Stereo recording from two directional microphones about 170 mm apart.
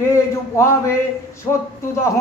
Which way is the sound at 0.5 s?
15° left (ahead or behind).